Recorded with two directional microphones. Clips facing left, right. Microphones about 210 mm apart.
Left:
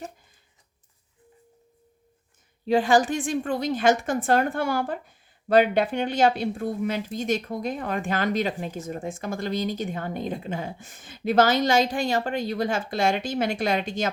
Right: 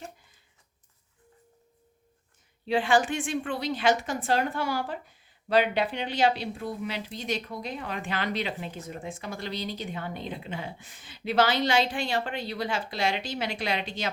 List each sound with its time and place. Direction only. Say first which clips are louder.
2.6 s a woman's voice: left 4 dB; 40° left (ahead or behind)